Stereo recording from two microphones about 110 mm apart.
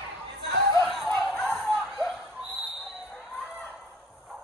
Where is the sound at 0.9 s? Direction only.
Centre (ahead or behind).